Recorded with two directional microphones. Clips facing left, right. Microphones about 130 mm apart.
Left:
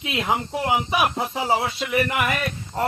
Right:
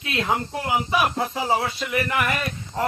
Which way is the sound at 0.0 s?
15° left (ahead or behind).